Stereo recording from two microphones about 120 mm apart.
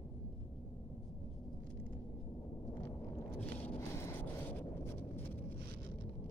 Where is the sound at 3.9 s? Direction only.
20° left (ahead or behind).